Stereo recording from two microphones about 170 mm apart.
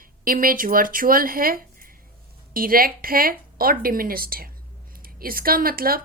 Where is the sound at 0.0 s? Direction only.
55° right (ahead or behind).